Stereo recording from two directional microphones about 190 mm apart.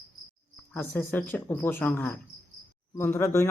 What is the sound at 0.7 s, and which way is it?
A man's voice, 10° left (ahead or behind).